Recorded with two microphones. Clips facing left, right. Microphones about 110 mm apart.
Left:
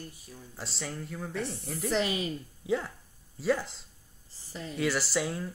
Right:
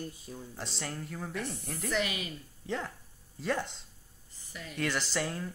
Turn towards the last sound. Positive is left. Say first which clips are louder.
# left 3 dB
turn(degrees=5)  # may be behind; listen again after turning